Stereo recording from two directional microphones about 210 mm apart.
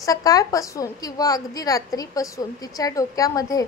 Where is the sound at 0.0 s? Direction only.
15° left (ahead or behind).